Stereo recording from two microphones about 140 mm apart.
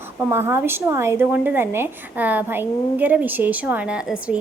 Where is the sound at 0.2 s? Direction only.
15° right (ahead or behind).